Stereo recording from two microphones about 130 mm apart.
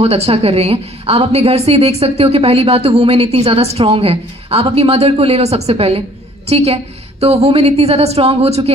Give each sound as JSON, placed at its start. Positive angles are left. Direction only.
{"t": 0.0, "sound": "a woman's voice", "side_deg": -50}